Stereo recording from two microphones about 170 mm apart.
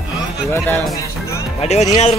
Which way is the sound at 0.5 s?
10° left (ahead or behind).